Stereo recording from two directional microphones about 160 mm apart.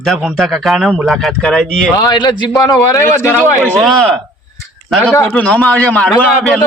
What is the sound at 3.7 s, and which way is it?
Speech, centre (ahead or behind).